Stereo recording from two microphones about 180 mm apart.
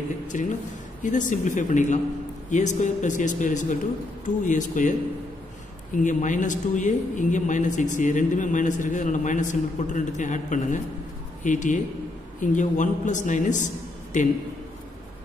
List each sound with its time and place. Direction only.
0.3 s a man's voice: 45° left (ahead or behind)
6.0 s a man's voice: 45° left (ahead or behind)